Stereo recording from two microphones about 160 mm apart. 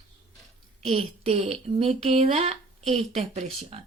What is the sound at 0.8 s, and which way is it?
A woman's voice, 40° right (ahead or behind).